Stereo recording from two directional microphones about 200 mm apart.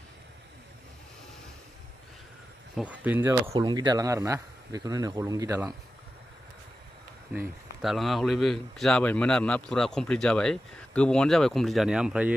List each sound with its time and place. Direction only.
2.7 s speech: 5° right (ahead or behind)
7.3 s a man's voice: centre (ahead or behind)